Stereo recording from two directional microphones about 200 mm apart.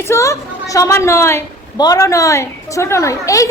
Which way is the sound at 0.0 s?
15° left (ahead or behind).